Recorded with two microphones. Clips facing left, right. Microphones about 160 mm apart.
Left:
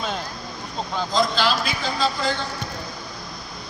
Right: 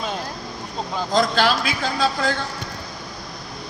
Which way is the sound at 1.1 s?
55° right (ahead or behind).